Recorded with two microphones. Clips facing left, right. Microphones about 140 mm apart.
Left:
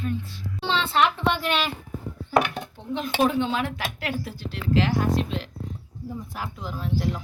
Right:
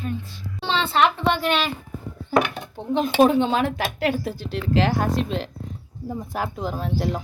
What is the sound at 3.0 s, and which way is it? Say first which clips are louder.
Speech: right 6 dB; 30° right (ahead or behind).